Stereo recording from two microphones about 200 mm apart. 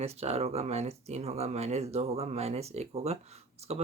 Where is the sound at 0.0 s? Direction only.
30° right (ahead or behind).